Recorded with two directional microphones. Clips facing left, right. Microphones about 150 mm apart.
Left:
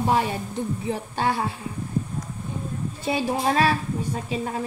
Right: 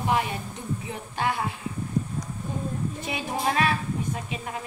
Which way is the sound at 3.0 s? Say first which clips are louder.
Left 7 dB; 30° left (ahead or behind).